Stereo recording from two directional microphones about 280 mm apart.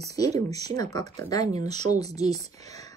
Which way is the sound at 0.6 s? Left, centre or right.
Centre.